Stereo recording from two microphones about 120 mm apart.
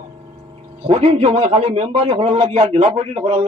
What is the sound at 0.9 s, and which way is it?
A man's voice, 55° right (ahead or behind).